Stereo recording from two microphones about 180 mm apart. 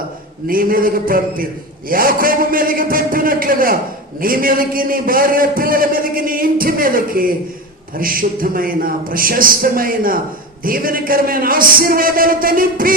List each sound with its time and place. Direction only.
0.4 s a man's voice: 50° right (ahead or behind)